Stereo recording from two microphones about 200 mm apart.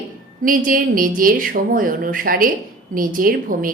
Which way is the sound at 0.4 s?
45° right (ahead or behind).